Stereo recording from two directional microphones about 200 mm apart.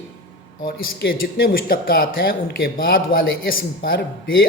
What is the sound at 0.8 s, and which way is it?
Speech, 50° left (ahead or behind).